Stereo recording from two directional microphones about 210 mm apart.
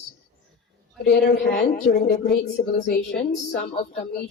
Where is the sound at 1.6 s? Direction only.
35° left (ahead or behind).